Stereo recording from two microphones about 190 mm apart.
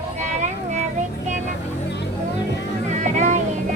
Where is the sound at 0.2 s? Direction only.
40° right (ahead or behind).